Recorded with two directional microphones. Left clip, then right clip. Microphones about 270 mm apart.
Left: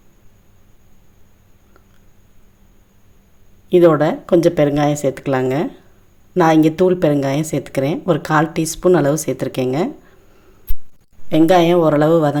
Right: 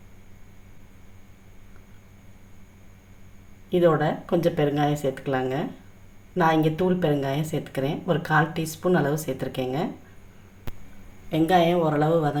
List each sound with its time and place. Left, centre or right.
3.7 s speech: left
11.3 s speech: left